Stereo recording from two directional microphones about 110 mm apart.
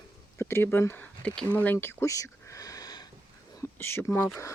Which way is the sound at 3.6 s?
20° left (ahead or behind).